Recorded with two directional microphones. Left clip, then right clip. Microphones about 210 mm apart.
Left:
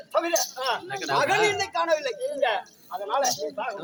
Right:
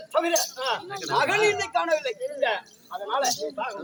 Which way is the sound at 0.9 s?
15° right (ahead or behind).